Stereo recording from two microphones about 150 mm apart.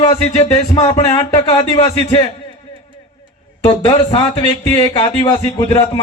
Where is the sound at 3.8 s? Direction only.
30° left (ahead or behind).